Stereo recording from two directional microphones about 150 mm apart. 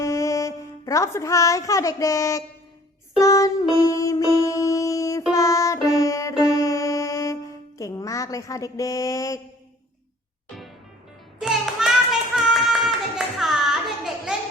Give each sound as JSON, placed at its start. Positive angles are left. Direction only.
{"t": 0.0, "sound": "a woman's voice", "side_deg": 20}
{"t": 3.2, "sound": "music", "side_deg": 20}
{"t": 11.3, "sound": "music", "side_deg": -5}
{"t": 12.4, "sound": "a sound", "side_deg": 0}